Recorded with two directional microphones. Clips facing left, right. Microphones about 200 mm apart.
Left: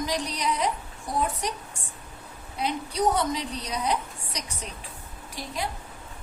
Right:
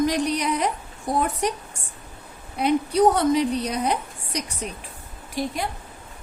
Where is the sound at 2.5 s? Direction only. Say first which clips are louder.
Right 8 dB; 55° right (ahead or behind).